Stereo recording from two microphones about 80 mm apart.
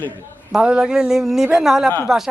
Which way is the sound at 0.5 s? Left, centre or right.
Centre.